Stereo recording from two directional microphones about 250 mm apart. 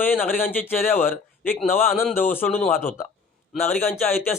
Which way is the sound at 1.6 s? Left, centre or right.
Centre.